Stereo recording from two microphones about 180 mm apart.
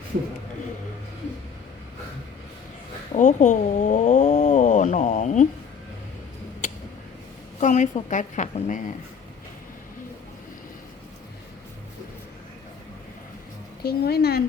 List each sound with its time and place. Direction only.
3.2 s a sound: 40° left (ahead or behind)
7.6 s a woman's voice: 40° left (ahead or behind)
13.8 s a woman's voice: 60° left (ahead or behind)